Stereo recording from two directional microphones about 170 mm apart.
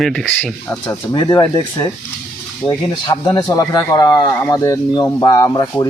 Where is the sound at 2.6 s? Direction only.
30° left (ahead or behind).